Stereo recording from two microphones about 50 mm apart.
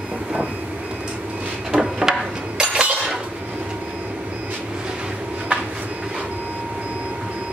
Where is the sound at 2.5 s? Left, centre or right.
Right.